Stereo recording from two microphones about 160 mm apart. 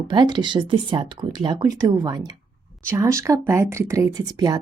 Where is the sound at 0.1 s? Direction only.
30° right (ahead or behind).